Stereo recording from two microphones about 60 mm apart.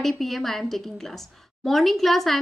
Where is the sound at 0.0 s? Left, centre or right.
Centre.